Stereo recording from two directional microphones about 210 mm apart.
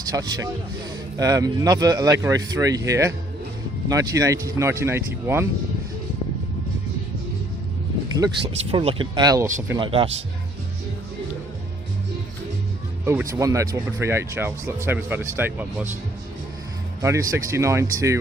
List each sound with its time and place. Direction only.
0.1 s speech: 20° right (ahead or behind)
8.7 s speech: 25° right (ahead or behind)
13.1 s speech: 10° right (ahead or behind)
17.0 s speech: 15° right (ahead or behind)